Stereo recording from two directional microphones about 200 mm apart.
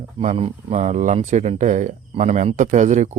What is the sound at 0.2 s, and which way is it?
Speech, 30° right (ahead or behind).